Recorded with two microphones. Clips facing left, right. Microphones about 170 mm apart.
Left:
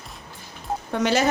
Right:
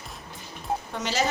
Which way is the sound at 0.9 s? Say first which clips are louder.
Left 8 dB; 60° left (ahead or behind).